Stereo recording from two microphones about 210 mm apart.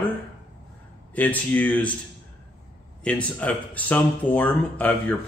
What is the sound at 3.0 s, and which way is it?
A man's voice, 5° left (ahead or behind).